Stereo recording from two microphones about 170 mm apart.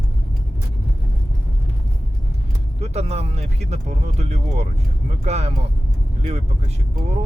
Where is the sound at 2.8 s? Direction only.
40° right (ahead or behind).